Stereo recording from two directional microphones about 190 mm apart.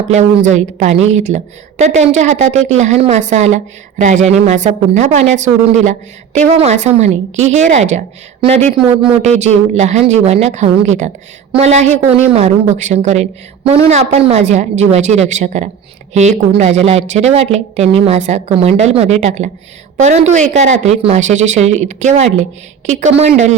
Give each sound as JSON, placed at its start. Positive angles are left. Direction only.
{"t": 0.1, "sound": "speech", "side_deg": -40}